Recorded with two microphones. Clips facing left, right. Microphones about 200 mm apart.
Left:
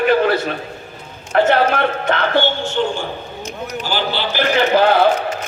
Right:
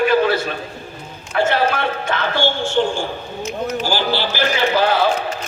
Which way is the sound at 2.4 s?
20° left (ahead or behind).